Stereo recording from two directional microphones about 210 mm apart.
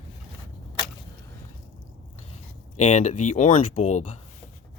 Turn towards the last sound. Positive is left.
turn(degrees=35)  # may be behind; listen again after turning